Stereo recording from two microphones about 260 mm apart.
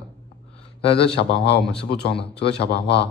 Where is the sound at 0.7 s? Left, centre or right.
Left.